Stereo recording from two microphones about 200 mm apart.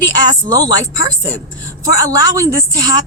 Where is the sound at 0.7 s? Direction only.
70° left (ahead or behind).